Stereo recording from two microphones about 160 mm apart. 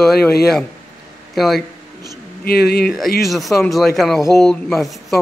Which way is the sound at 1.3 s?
Centre (ahead or behind).